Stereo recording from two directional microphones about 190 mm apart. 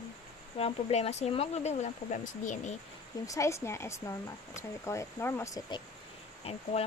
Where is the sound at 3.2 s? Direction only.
15° left (ahead or behind).